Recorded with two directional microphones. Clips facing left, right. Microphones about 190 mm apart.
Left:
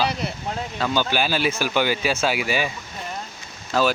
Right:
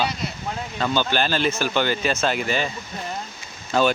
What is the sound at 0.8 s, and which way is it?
Speech, 10° left (ahead or behind).